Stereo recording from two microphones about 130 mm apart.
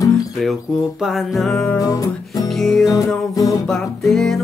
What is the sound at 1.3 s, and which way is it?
Music, 5° left (ahead or behind).